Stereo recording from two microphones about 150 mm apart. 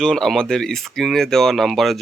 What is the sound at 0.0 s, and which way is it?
Speech, centre (ahead or behind).